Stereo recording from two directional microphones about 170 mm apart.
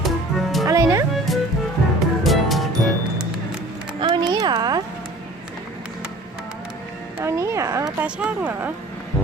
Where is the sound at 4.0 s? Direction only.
25° right (ahead or behind).